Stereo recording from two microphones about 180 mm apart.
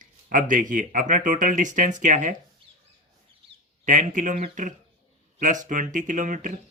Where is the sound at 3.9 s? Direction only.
45° right (ahead or behind).